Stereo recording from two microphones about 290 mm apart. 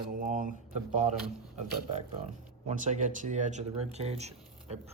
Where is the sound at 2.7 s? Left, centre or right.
Right.